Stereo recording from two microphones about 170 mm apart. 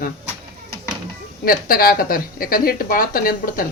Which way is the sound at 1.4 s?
60° left (ahead or behind).